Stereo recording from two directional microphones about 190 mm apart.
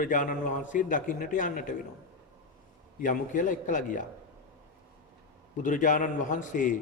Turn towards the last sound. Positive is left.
turn(degrees=45)  # may be behind; listen again after turning